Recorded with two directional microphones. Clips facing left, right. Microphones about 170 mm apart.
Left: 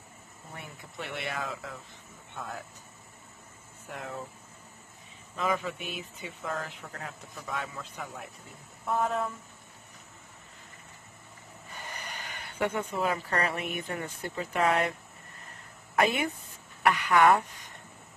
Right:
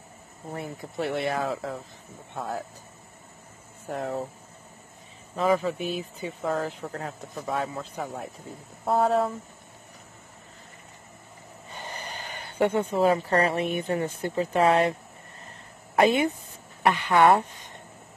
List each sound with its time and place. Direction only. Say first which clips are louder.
0.5 s speech: right 11 dB; 35° right (ahead or behind)
3.8 s speech: right 9 dB; 40° right (ahead or behind)
5.3 s speech: right 7 dB; 35° right (ahead or behind)
11.7 s speech: right 4 dB; 30° right (ahead or behind)
16.0 s speech: right 6 dB; 25° right (ahead or behind)